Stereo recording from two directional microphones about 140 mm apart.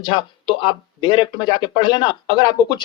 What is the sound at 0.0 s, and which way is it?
Speech, 35° left (ahead or behind).